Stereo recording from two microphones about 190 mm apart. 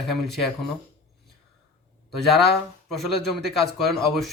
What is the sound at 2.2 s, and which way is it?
A man's voice, centre (ahead or behind).